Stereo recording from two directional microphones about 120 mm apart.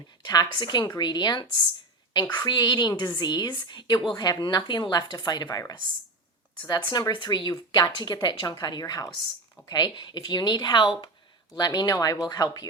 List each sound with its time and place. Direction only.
0.3 s a woman's voice: 35° left (ahead or behind)